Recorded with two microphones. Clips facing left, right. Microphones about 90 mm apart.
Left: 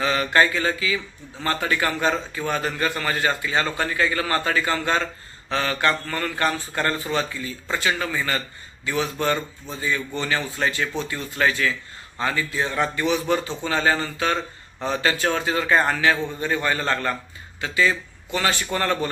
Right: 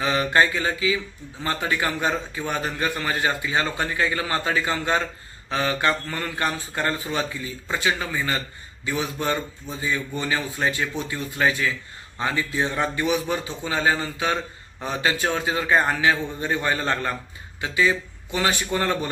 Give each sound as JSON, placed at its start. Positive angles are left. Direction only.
{"t": 0.0, "sound": "mantra", "side_deg": -20}
{"t": 1.4, "sound": "a man's voice", "side_deg": -15}